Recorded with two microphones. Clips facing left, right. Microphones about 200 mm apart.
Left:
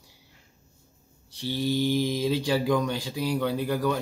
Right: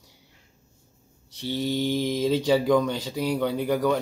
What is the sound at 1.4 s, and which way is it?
Speech, 20° right (ahead or behind).